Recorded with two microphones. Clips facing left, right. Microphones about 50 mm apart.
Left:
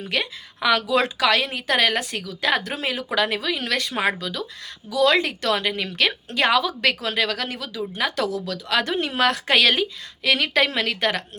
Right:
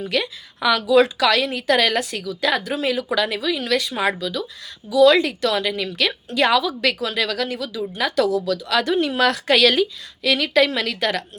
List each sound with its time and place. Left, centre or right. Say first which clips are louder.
0.1 s a woman's voice: left 1 dB; left